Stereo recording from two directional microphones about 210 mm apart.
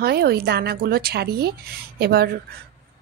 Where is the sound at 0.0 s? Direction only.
50° right (ahead or behind).